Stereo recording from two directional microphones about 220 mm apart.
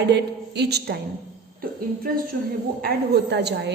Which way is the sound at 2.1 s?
45° right (ahead or behind).